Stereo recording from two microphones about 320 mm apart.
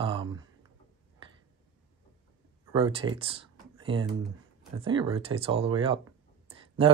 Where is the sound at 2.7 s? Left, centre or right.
Centre.